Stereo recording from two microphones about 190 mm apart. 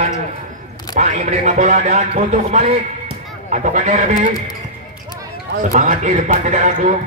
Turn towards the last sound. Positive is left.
turn(degrees=-40)  # may be behind; listen again after turning